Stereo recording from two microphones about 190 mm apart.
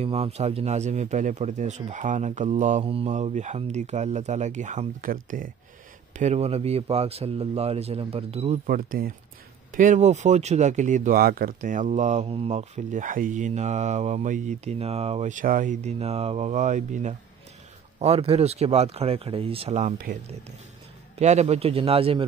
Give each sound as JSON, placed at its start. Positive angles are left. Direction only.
{"t": 0.0, "sound": "speech", "side_deg": -35}
{"t": 8.6, "sound": "speech", "side_deg": -50}
{"t": 21.2, "sound": "speech", "side_deg": -35}